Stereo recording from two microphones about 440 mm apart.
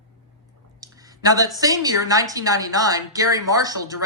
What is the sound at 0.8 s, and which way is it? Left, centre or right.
A woman's voice, centre.